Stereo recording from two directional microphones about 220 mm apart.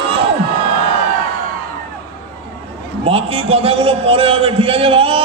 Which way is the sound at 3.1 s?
25° right (ahead or behind).